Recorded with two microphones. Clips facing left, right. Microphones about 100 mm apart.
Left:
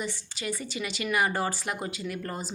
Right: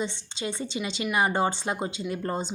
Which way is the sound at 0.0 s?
25° right (ahead or behind).